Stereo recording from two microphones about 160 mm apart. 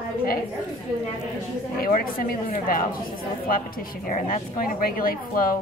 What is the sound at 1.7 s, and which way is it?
A woman's voice, 65° left (ahead or behind).